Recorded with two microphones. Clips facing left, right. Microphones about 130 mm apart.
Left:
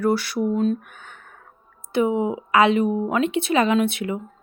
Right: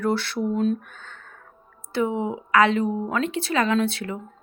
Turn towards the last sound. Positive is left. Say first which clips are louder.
# left 3 dB
turn(degrees=20)  # may be behind; listen again after turning